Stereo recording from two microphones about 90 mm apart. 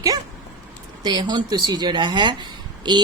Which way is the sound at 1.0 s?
50° right (ahead or behind).